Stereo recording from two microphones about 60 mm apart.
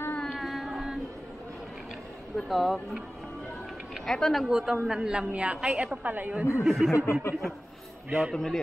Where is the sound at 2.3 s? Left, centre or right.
Centre.